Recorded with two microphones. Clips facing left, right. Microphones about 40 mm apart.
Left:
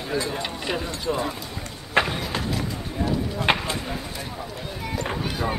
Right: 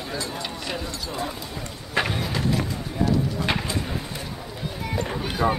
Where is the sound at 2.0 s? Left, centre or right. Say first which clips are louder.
Right 1 dB; centre.